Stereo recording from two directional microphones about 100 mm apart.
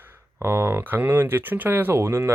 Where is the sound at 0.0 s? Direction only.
25° right (ahead or behind).